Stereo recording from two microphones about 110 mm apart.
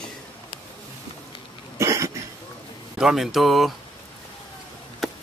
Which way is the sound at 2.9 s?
5° right (ahead or behind).